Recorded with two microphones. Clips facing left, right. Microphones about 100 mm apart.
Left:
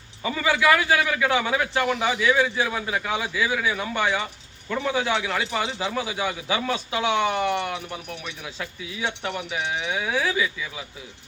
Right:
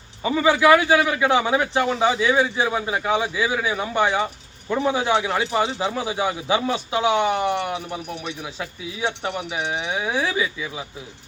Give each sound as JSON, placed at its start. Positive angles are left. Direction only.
{"t": 0.2, "sound": "a man's voice", "side_deg": -25}
{"t": 8.2, "sound": "a man's voice", "side_deg": -30}